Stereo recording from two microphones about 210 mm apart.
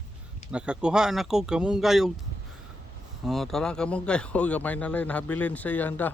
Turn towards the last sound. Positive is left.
turn(degrees=10)  # may be behind; listen again after turning